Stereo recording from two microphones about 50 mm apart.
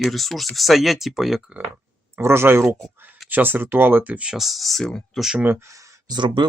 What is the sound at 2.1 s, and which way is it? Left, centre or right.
Speech, right.